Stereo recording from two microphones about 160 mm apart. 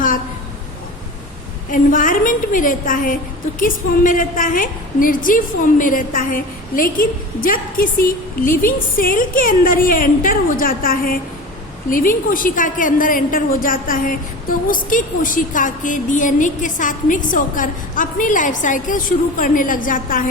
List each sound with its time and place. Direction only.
1.7 s a woman's voice: 55° left (ahead or behind)